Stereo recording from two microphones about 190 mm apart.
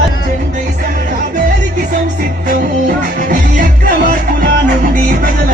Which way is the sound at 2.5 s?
45° right (ahead or behind).